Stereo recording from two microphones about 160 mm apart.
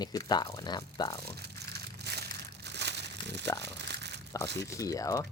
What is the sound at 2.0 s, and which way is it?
Crushing, 90° right.